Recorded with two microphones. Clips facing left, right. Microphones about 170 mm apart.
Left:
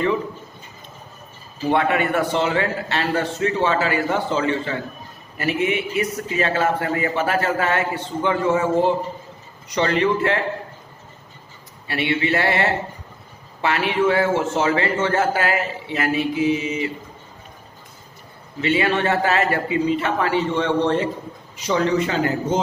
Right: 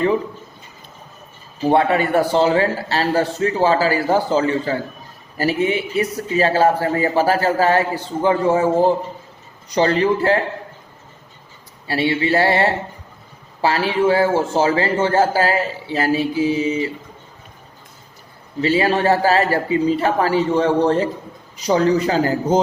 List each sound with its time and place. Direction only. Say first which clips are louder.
1.6 s a man's voice: right 3 dB; 35° right (ahead or behind)
11.9 s a man's voice: right 3 dB; 30° right (ahead or behind)
18.6 s a man's voice: right 3 dB; 35° right (ahead or behind)